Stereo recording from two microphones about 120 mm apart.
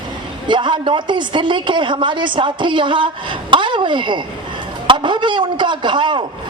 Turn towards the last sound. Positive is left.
turn(degrees=-40)  # may be behind; listen again after turning